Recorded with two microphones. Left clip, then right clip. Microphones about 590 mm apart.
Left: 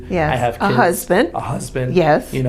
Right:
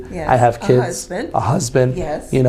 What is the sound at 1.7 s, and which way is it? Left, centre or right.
Speech, right.